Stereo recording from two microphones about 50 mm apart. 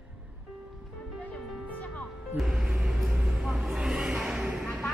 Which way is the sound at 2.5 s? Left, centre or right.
Centre.